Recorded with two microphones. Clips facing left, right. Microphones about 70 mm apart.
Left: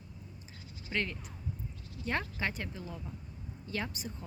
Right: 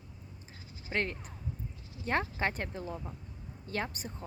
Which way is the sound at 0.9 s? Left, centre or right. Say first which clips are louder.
Right 2 dB; right.